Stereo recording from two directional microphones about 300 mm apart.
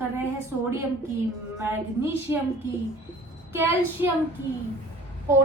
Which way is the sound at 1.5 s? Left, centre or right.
Centre.